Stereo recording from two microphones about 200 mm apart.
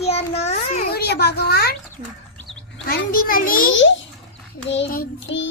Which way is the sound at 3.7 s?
70° left (ahead or behind).